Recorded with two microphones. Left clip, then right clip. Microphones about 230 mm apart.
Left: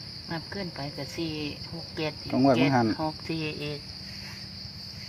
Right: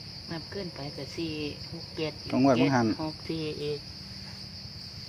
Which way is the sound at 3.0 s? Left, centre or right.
Left.